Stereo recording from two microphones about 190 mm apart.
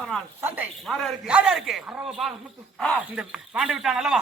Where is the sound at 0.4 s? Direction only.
10° right (ahead or behind).